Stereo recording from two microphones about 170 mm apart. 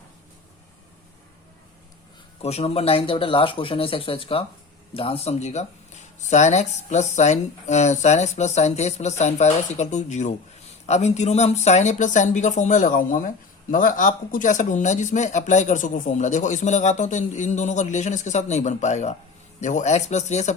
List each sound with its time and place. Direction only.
2.4 s speech: 40° left (ahead or behind)